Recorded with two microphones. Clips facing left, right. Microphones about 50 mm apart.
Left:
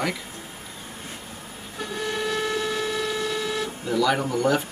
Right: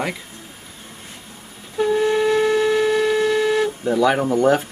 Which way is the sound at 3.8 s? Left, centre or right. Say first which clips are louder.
Right 1 dB; right.